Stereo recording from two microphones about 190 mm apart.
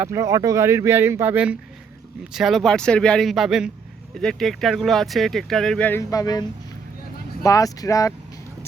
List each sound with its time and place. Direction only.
0.0 s speech: 15° right (ahead or behind); by 6.4 s 20° left (ahead or behind)
7.4 s speech: 20° left (ahead or behind)